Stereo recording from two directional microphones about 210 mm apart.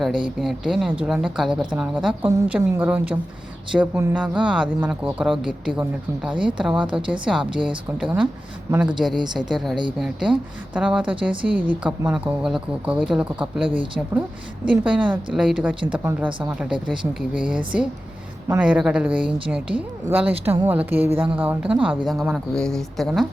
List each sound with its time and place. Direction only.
0.0 s a woman's voice: centre (ahead or behind)
9.2 s a woman's voice: 20° right (ahead or behind)
9.5 s a woman's voice: centre (ahead or behind)
14.7 s a woman's voice: 5° right (ahead or behind)